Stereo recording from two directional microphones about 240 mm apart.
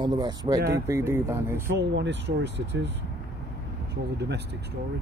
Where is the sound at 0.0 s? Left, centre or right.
Centre.